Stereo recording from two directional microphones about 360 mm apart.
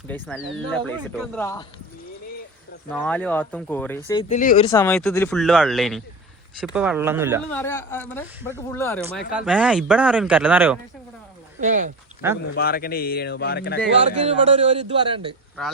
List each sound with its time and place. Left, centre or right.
0.1 s speech: centre
2.9 s speech: centre
4.8 s speech: centre
7.5 s speech: centre
11.6 s speech: right
12.2 s a man's voice: centre
12.5 s speech: left
14.3 s a man's voice: centre